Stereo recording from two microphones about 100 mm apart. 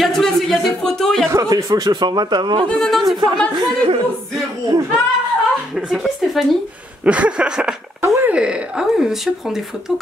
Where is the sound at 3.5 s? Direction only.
50° right (ahead or behind).